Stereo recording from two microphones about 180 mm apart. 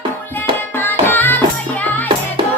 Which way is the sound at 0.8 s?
10° left (ahead or behind).